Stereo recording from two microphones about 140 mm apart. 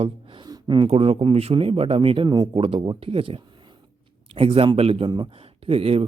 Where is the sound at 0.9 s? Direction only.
45° right (ahead or behind).